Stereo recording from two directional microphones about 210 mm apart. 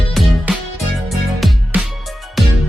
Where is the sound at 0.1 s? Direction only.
Centre (ahead or behind).